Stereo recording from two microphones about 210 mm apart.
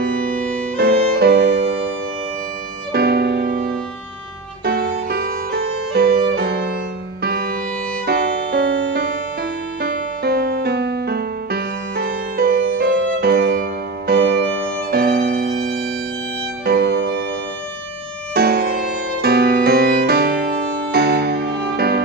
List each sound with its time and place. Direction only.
0.0 s music: 40° right (ahead or behind)
2.9 s music: 50° right (ahead or behind)
16.6 s music: 50° right (ahead or behind)
18.3 s music: 50° right (ahead or behind)